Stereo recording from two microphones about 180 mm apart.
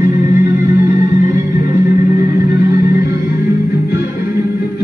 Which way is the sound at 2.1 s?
20° right (ahead or behind).